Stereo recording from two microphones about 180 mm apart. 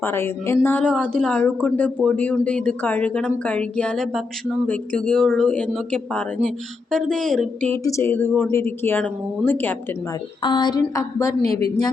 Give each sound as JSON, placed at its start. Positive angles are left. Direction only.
{"t": 0.0, "sound": "speech", "side_deg": 15}
{"t": 10.4, "sound": "a woman's voice", "side_deg": 25}